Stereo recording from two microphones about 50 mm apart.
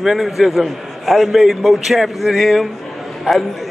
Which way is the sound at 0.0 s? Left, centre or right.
Centre.